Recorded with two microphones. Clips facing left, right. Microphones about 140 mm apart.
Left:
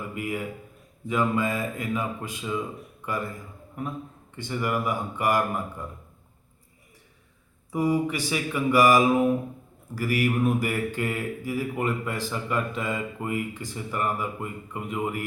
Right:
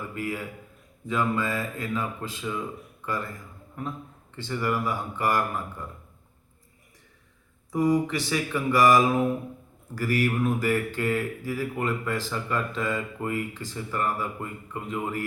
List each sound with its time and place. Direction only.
0.1 s a man's voice: 15° left (ahead or behind)
4.4 s speech: 15° left (ahead or behind)
7.7 s speech: 10° left (ahead or behind)